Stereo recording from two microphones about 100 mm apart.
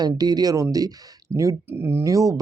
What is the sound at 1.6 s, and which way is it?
Speech, 20° right (ahead or behind).